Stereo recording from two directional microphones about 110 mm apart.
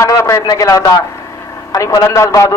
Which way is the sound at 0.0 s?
25° left (ahead or behind).